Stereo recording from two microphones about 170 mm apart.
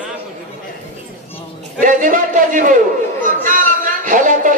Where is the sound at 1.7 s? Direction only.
50° right (ahead or behind).